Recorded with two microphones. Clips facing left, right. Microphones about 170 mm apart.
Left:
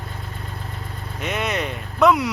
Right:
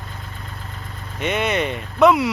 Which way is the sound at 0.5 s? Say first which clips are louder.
Left 2 dB; 35° left (ahead or behind).